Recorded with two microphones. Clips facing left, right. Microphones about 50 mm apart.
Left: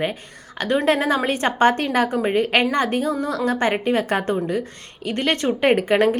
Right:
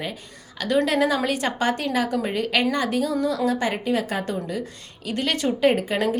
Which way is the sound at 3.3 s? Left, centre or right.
Left.